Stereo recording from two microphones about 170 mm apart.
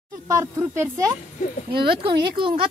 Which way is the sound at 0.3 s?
15° right (ahead or behind).